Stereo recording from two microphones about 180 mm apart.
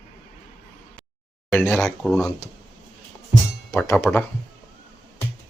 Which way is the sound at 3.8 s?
15° left (ahead or behind).